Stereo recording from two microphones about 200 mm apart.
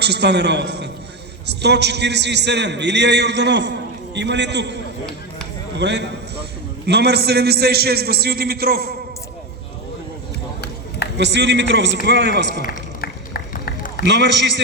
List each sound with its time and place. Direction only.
0.0 s a man's voice: 55° right (ahead or behind)
11.2 s a man's voice: 60° right (ahead or behind)
12.6 s run: 45° left (ahead or behind)
14.0 s a man's voice: 60° right (ahead or behind)